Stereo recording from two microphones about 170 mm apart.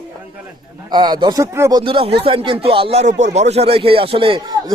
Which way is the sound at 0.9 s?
25° right (ahead or behind).